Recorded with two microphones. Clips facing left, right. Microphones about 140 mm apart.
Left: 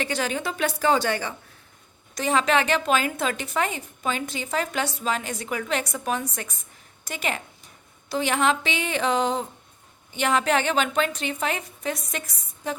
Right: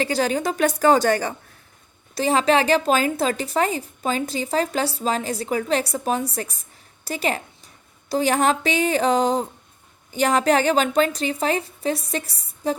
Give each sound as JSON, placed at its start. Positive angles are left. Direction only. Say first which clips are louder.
{"t": 0.0, "sound": "a woman's voice", "louder": "right 5 dB", "side_deg": -35}